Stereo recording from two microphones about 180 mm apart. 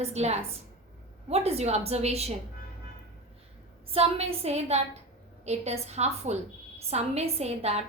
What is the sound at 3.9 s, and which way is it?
A woman's voice, 35° right (ahead or behind).